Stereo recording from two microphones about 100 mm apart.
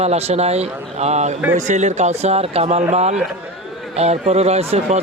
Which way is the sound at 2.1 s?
90° right.